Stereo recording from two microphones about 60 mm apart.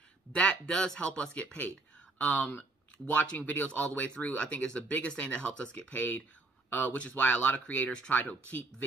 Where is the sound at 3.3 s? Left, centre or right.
Left.